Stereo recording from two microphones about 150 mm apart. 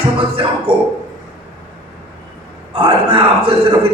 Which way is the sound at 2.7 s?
35° right (ahead or behind).